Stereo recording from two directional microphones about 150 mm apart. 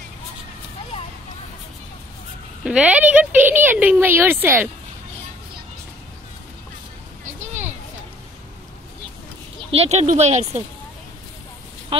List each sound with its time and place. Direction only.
2.6 s a woman's voice: 5° right (ahead or behind)
9.7 s speech: 45° right (ahead or behind)
11.9 s speech: 35° right (ahead or behind)